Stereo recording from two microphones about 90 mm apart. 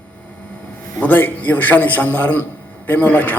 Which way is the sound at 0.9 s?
20° left (ahead or behind).